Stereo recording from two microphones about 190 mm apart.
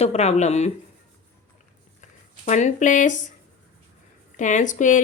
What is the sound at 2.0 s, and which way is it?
Speech, 40° left (ahead or behind).